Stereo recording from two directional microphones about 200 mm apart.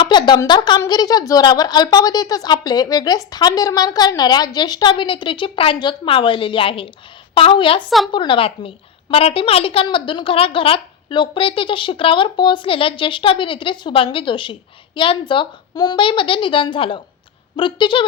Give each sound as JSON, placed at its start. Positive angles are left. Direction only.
{"t": 0.0, "sound": "a woman's voice", "side_deg": 25}
{"t": 7.9, "sound": "a woman's voice", "side_deg": 0}
{"t": 8.1, "sound": "a woman's voice", "side_deg": 25}